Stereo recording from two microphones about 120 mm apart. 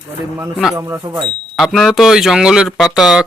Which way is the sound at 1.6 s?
Centre (ahead or behind).